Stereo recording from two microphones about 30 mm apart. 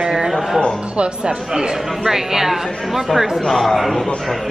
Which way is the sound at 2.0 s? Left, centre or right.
Centre.